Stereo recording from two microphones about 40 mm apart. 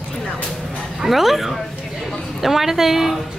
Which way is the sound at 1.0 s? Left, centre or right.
Centre.